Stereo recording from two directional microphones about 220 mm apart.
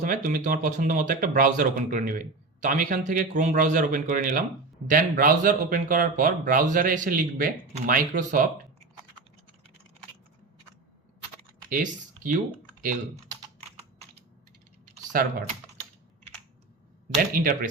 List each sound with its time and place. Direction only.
0.0 s speech: 35° right (ahead or behind)
11.7 s speech: 35° right (ahead or behind)
15.1 s speech: 45° right (ahead or behind)
17.1 s speech: 40° right (ahead or behind)